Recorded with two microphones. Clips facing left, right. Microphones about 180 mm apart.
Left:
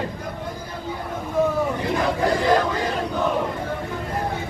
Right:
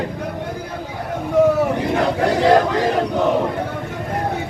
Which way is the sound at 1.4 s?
75° right (ahead or behind).